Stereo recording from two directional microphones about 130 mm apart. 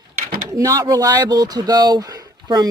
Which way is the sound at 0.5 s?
25° right (ahead or behind).